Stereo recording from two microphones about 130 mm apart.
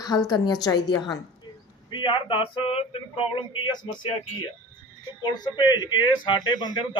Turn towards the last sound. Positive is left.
turn(degrees=35)  # may be behind; listen again after turning